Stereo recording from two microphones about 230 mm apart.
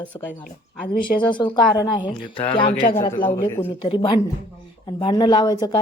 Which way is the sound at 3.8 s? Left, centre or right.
Left.